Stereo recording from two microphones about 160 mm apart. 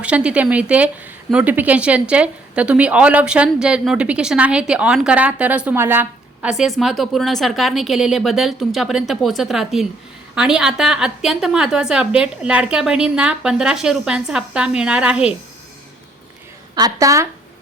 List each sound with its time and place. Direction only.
0.0 s a woman's voice: 5° right (ahead or behind)
16.7 s speech: 20° right (ahead or behind)